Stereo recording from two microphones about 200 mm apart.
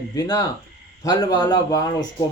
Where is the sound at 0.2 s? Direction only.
20° left (ahead or behind).